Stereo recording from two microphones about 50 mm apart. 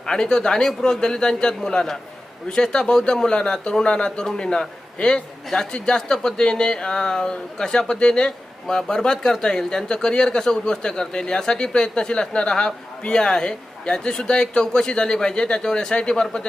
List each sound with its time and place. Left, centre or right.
0.0 s speech: centre